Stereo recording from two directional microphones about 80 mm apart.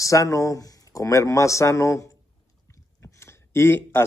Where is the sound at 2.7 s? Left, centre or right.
Left.